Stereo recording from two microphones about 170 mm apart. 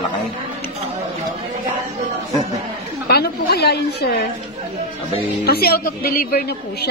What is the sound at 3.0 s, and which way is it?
A woman's voice, 65° left (ahead or behind).